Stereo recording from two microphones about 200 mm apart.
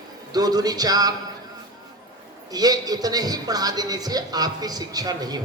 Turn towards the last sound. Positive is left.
turn(degrees=-20)  # may be behind; listen again after turning